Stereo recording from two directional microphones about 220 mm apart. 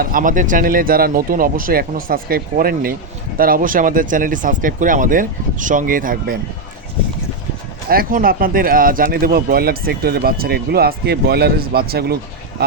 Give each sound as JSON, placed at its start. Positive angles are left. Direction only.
{"t": 0.0, "sound": "speech", "side_deg": -40}
{"t": 7.9, "sound": "speech", "side_deg": -40}